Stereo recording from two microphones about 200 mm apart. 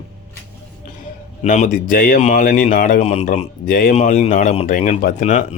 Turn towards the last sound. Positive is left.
turn(degrees=45)  # may be behind; listen again after turning